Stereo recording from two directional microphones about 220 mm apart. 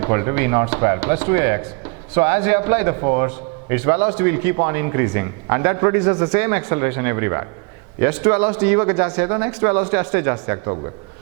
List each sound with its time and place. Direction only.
0.0 s a man's voice: 15° right (ahead or behind)